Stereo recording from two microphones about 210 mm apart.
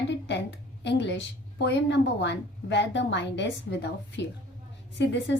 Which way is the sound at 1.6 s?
55° left (ahead or behind).